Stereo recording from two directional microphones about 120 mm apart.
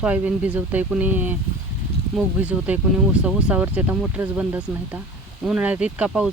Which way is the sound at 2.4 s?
10° right (ahead or behind).